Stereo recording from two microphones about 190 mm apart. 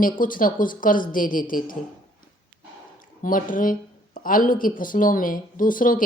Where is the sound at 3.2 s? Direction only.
45° left (ahead or behind).